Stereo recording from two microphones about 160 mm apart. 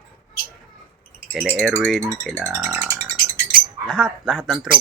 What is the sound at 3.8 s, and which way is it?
Speech, 5° left (ahead or behind).